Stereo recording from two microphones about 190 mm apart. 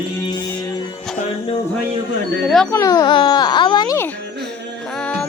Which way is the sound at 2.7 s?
15° left (ahead or behind).